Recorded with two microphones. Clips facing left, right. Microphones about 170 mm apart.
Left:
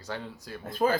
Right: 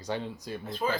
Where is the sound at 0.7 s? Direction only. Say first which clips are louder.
Left 5 dB; 50° left (ahead or behind).